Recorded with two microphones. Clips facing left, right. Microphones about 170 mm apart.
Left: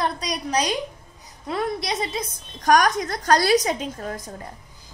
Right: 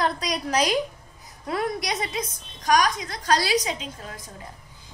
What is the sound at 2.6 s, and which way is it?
A woman's voice, 50° left (ahead or behind).